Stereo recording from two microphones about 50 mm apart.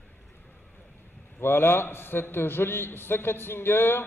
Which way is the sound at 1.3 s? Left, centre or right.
Left.